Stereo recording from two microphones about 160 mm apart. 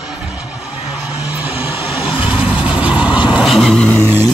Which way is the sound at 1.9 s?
Centre (ahead or behind).